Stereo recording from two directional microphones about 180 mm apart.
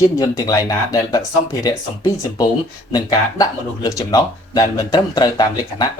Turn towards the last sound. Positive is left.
turn(degrees=20)  # may be behind; listen again after turning